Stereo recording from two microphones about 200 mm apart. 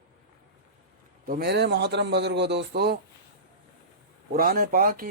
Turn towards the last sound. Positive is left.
turn(degrees=-45)  # may be behind; listen again after turning